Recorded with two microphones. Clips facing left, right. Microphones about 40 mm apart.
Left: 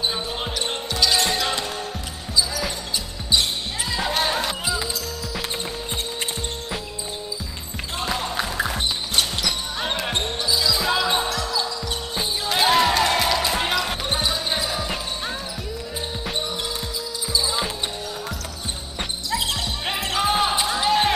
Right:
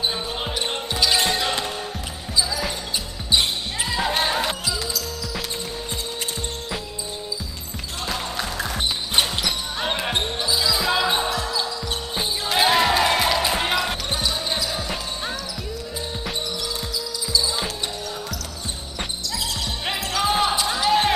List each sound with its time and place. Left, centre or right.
0.6 s basketball bounce: centre
3.9 s music: centre
4.6 s music: left
8.1 s music: centre
9.8 s basketball bounce: centre
12.2 s music: centre
14.8 s basketball bounce: centre
17.3 s basketball bounce: left
20.2 s basketball bounce: centre
20.6 s a sound: centre